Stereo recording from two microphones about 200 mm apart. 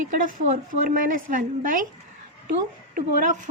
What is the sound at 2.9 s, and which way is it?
Speech, 40° right (ahead or behind).